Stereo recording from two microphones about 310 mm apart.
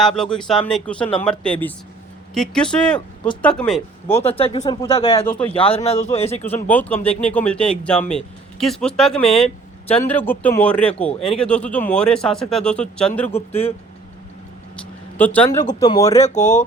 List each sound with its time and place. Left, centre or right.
0.0 s speech: centre
4.2 s speech: centre
5.5 s speech: centre
6.7 s speech: centre
13.5 s speech: centre
15.2 s speech: centre
16.2 s speech: left